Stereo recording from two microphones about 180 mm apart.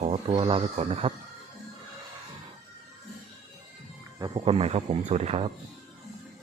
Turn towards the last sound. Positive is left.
turn(degrees=-35)  # may be behind; listen again after turning